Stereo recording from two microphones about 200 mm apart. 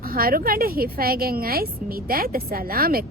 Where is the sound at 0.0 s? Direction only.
45° right (ahead or behind).